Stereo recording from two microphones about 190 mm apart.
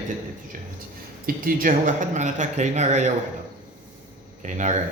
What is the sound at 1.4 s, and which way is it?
A man's voice, 45° right (ahead or behind).